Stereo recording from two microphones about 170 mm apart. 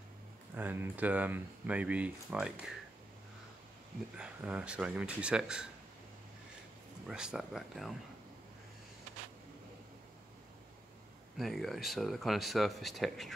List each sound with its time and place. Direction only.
0.6 s speech: 10° right (ahead or behind)
4.2 s speech: 5° right (ahead or behind)
7.1 s speech: 5° right (ahead or behind)
11.3 s speech: centre (ahead or behind)